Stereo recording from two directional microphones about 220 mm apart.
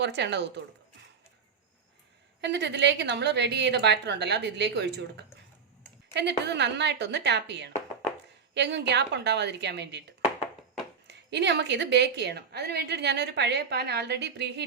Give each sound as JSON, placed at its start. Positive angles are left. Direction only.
{"t": 0.0, "sound": "a woman's voice", "side_deg": -50}
{"t": 2.4, "sound": "a woman's voice", "side_deg": -50}